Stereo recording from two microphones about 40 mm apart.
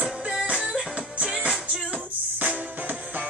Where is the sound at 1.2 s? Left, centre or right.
Right.